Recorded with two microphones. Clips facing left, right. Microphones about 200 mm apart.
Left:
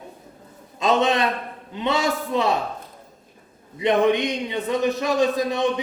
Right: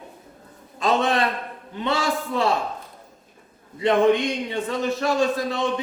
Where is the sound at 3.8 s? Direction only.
20° left (ahead or behind).